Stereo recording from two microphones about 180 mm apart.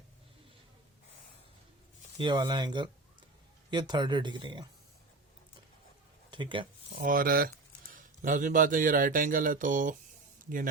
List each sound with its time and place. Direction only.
2.1 s speech: 25° right (ahead or behind)
6.3 s speech: 25° right (ahead or behind)
7.0 s speech: 50° right (ahead or behind)